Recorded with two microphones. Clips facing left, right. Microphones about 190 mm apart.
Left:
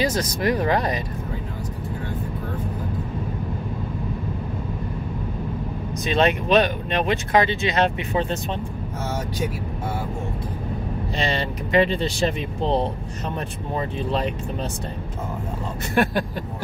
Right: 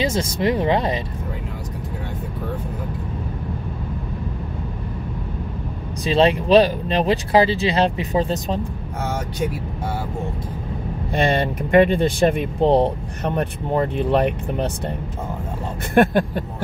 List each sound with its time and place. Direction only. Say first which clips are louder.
0.0 s speech: right 2 dB; 25° right (ahead or behind)
6.0 s speech: right 4 dB; 30° right (ahead or behind)
11.1 s speech: right 7 dB; 55° right (ahead or behind)
15.9 s speech: right 6 dB; 50° right (ahead or behind)